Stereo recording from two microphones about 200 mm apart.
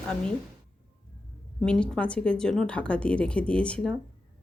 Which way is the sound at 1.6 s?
5° left (ahead or behind).